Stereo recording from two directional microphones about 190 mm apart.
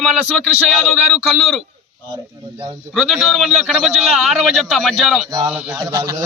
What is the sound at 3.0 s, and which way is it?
Speech, centre (ahead or behind).